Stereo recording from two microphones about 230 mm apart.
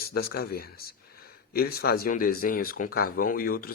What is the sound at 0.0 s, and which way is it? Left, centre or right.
Speech, left.